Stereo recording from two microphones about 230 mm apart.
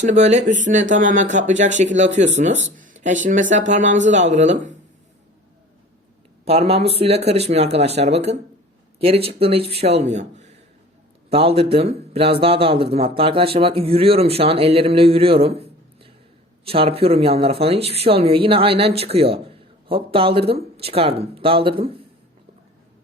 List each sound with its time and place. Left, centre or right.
0.0 s speech: right
6.4 s speech: right